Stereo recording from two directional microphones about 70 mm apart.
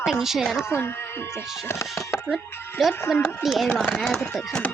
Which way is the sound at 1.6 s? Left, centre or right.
Left.